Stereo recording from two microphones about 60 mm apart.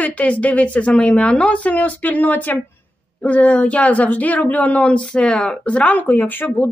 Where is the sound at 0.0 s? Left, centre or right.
Left.